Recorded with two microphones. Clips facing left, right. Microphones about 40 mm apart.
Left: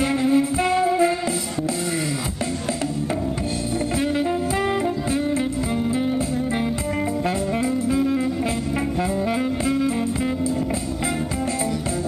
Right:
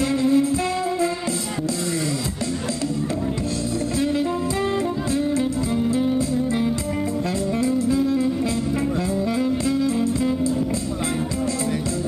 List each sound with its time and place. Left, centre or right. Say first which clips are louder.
0.0 s music: even; centre
7.6 s saxophone: right 2 dB; left
9.7 s music: right 1 dB; left